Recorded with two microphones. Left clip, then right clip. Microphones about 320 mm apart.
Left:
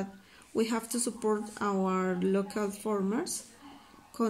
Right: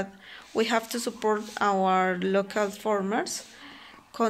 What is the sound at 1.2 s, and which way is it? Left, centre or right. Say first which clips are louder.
Speech: right 5 dB; right.